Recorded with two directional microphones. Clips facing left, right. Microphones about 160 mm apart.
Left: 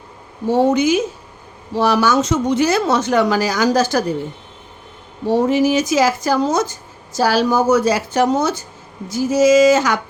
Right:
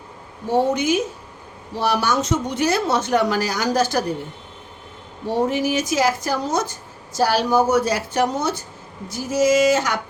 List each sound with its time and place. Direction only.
0.7 s speech: 90° left
5.3 s speech: 90° left